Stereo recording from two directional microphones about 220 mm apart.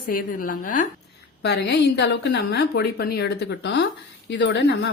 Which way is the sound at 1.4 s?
50° left (ahead or behind).